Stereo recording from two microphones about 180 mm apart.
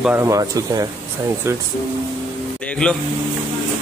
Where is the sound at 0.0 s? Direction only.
15° right (ahead or behind).